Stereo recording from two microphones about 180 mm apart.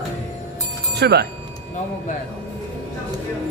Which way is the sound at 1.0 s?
65° right (ahead or behind).